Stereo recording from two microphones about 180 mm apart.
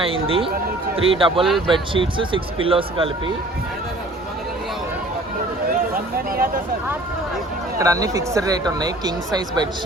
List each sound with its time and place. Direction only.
0.0 s speech: 30° right (ahead or behind)
1.5 s speech: centre (ahead or behind)
1.7 s speech: 30° right (ahead or behind)
5.9 s speech: 55° right (ahead or behind)
7.8 s speech: 20° right (ahead or behind)